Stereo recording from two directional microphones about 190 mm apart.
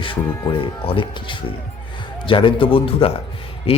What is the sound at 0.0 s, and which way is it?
Speech, 25° left (ahead or behind).